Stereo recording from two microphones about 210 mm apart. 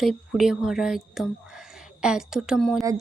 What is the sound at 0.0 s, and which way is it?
Speech, centre (ahead or behind).